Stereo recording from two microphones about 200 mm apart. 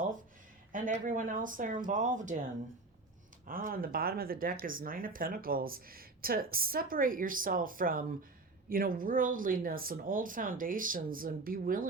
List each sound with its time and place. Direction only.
0.7 s speech: 40° right (ahead or behind)
3.4 s speech: 45° right (ahead or behind)